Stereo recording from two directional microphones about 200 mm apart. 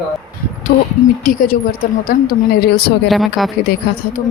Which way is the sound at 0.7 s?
55° left (ahead or behind).